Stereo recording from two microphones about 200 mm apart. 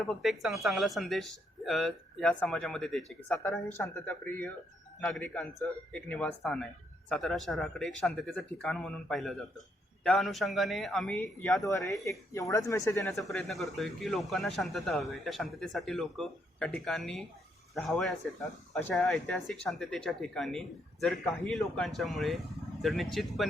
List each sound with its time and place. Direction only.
0.1 s speech: centre (ahead or behind)
11.6 s speech: 15° left (ahead or behind)
13.1 s speech: 5° left (ahead or behind)